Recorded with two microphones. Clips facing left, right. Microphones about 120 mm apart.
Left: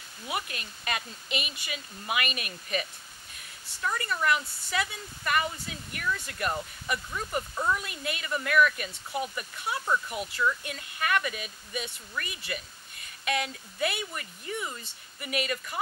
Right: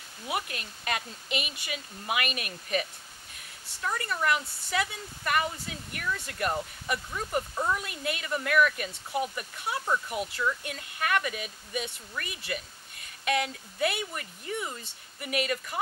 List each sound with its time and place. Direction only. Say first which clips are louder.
0.3 s a woman's voice: right 1 dB; 50° right (ahead or behind)
3.8 s a woman's voice: left 1 dB; 40° right (ahead or behind)
7.1 s speech: even; 35° right (ahead or behind)
7.7 s a woman's voice: right 1 dB; 50° right (ahead or behind)
9.8 s speech: left 1 dB; 30° right (ahead or behind)
10.6 s a woman's voice: even; 50° right (ahead or behind)